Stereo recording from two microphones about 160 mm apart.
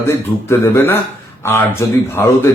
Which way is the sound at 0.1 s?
15° left (ahead or behind).